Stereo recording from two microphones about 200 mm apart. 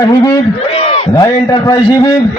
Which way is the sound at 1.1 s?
20° left (ahead or behind).